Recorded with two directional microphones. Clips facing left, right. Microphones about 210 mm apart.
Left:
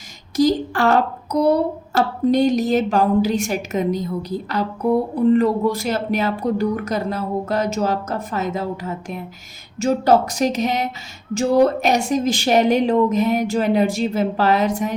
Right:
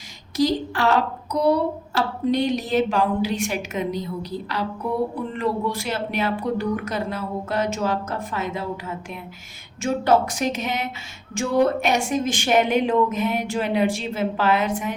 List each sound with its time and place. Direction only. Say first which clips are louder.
0.3 s a woman's voice: left 4 dB; 45° left (ahead or behind)